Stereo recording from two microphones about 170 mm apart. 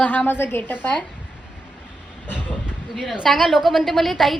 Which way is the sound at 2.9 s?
Centre (ahead or behind).